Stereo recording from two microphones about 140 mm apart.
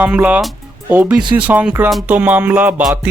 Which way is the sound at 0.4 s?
10° right (ahead or behind).